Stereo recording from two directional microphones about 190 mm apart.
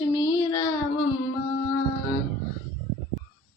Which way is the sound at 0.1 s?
20° left (ahead or behind).